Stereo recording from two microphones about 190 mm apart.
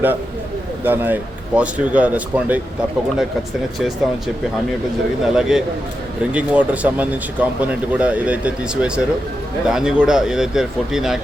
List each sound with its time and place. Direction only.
0.9 s speech: 10° right (ahead or behind)
5.2 s speech: centre (ahead or behind)